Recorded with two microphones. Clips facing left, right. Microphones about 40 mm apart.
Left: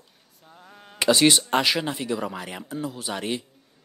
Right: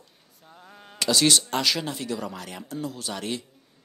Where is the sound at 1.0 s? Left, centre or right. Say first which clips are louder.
Left 3 dB; left.